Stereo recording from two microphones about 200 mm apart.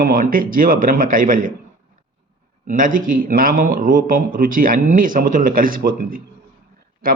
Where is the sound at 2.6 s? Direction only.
40° right (ahead or behind).